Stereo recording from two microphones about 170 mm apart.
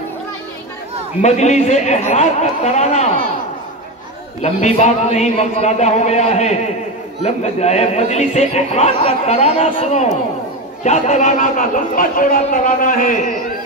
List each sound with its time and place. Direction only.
1.2 s speech: 40° left (ahead or behind)
4.4 s speech: 40° left (ahead or behind)